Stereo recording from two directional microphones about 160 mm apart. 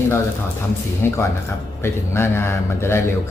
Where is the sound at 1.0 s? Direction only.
15° left (ahead or behind).